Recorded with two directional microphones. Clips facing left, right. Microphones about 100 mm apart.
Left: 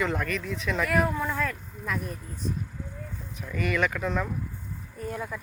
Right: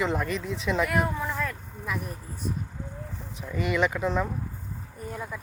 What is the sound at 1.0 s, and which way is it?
Speech, centre (ahead or behind).